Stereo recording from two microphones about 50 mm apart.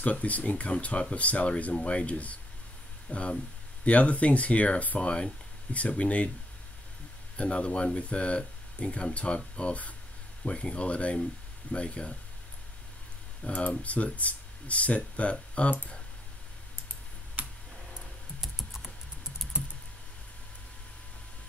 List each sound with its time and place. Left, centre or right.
0.0 s speech: left
7.3 s speech: left
13.4 s speech: left
18.4 s typing: centre